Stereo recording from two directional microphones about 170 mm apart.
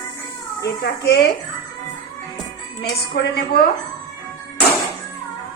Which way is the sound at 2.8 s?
65° left (ahead or behind).